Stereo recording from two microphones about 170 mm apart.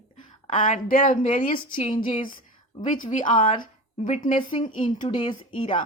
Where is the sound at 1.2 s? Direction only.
40° left (ahead or behind).